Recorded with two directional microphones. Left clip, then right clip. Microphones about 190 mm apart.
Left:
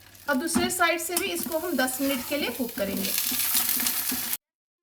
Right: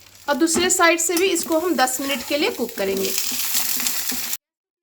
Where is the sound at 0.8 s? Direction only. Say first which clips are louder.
Right 9 dB; 55° right (ahead or behind).